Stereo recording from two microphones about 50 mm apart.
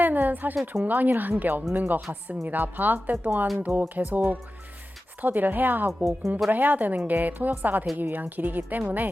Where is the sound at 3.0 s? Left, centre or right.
Right.